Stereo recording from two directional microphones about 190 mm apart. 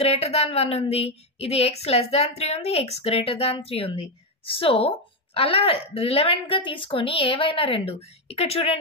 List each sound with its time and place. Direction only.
0.0 s a woman's voice: 30° left (ahead or behind)